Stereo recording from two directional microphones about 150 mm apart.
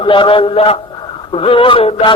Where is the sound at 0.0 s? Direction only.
35° left (ahead or behind).